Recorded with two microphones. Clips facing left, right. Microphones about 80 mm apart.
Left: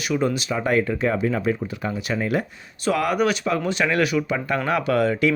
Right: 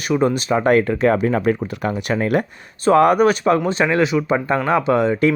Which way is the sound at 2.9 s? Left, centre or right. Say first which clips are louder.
Right 8 dB; right.